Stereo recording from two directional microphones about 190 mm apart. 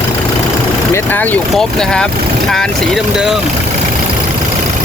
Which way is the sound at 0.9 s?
10° left (ahead or behind).